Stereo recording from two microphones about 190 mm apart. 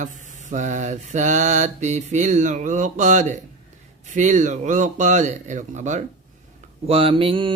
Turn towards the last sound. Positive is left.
turn(degrees=-30)  # may be behind; listen again after turning